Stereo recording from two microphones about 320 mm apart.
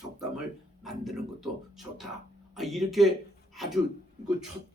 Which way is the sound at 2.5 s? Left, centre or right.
Centre.